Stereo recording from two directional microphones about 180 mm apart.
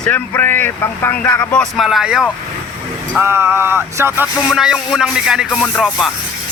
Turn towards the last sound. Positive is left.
turn(degrees=0)  # may be behind; listen again after turning